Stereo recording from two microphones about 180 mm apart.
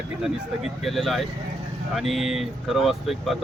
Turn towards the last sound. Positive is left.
turn(degrees=0)  # may be behind; listen again after turning